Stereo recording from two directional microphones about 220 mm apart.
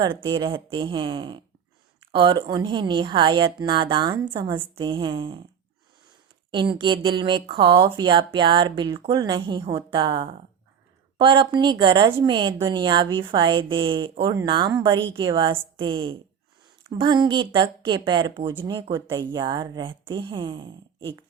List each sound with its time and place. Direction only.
0.0 s a woman's voice: 20° right (ahead or behind)
4.5 s a woman's voice: 10° right (ahead or behind)
4.8 s a woman's voice: 20° right (ahead or behind)
6.5 s a woman's voice: 20° right (ahead or behind)